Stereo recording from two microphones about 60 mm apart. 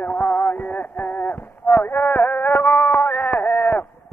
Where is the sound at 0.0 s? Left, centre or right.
Left.